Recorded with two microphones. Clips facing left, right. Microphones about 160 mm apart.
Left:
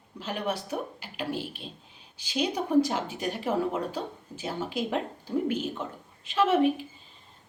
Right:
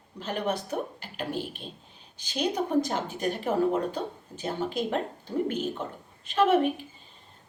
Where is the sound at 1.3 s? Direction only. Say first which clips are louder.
Right 1 dB; 45° right (ahead or behind).